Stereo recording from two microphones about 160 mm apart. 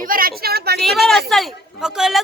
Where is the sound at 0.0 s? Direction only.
65° right (ahead or behind); by 0.8 s 80° right.